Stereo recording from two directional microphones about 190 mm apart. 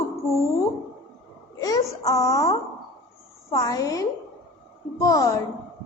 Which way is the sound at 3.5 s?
20° left (ahead or behind).